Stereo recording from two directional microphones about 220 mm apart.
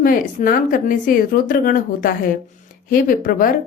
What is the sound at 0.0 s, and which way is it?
A woman's voice, 40° left (ahead or behind).